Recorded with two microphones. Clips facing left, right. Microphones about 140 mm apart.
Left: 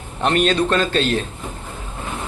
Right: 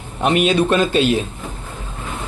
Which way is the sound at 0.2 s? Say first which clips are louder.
Right 2 dB; 5° right (ahead or behind).